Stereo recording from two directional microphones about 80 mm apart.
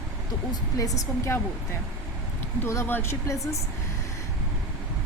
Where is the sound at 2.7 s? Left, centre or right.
Left.